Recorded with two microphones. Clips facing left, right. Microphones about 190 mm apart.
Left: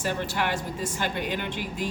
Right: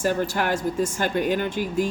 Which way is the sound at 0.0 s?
45° right (ahead or behind).